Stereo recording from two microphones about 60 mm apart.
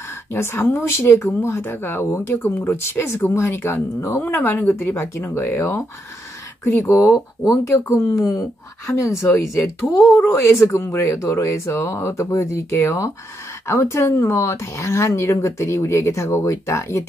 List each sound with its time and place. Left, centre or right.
0.3 s speech: left
4.2 s speech: left
7.9 s speech: left
9.8 s speech: left
10.4 s speech: left